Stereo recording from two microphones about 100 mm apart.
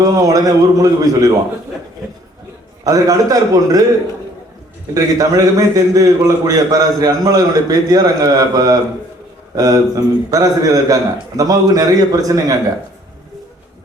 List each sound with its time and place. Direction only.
0.3 s a man's voice: 35° right (ahead or behind)
2.8 s a man's voice: 35° right (ahead or behind)
4.9 s a man's voice: 35° right (ahead or behind)